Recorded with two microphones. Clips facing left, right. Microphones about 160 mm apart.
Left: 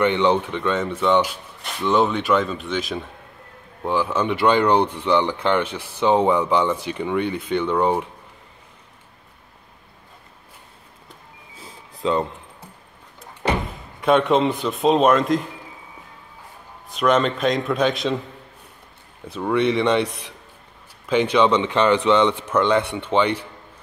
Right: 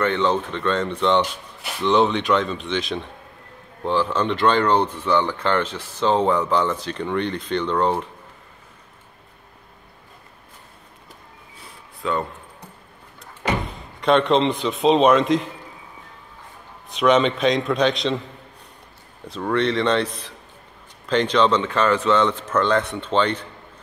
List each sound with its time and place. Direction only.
0.0 s a man's voice: 15° left (ahead or behind)
12.0 s speech: 20° left (ahead or behind)
14.0 s a man's voice: 5° left (ahead or behind)
16.9 s a man's voice: centre (ahead or behind)
19.2 s speech: 10° left (ahead or behind)